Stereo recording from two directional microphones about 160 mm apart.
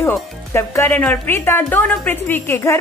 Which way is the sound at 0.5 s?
15° left (ahead or behind).